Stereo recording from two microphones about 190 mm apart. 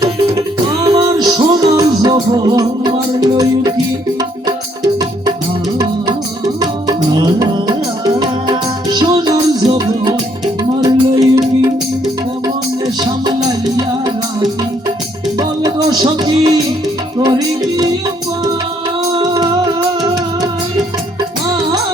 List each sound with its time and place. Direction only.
0.0 s music: 15° right (ahead or behind)
13.0 s music: 20° right (ahead or behind)
15.4 s music: 20° right (ahead or behind)
19.2 s music: 20° right (ahead or behind)